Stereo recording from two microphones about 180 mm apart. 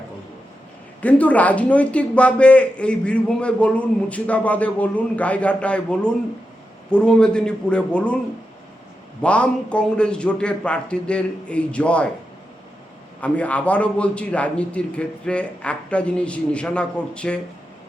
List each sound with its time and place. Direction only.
1.0 s a man's voice: 10° left (ahead or behind)
9.2 s a man's voice: 5° left (ahead or behind)
13.2 s a man's voice: 10° left (ahead or behind)